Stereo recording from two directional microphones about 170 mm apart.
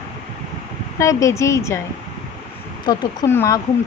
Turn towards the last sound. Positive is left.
turn(degrees=15)  # may be behind; listen again after turning